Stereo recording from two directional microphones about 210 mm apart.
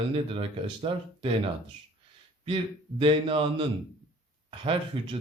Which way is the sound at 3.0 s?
25° right (ahead or behind).